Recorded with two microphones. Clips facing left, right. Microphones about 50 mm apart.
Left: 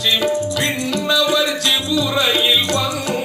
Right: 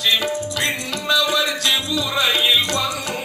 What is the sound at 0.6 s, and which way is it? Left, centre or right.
Music, right.